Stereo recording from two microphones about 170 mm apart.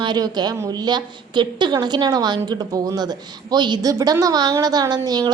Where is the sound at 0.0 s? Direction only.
25° right (ahead or behind).